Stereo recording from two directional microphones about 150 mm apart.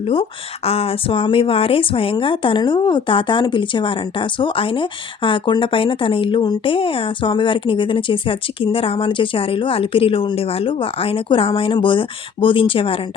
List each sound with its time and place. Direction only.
0.0 s speech: 40° left (ahead or behind)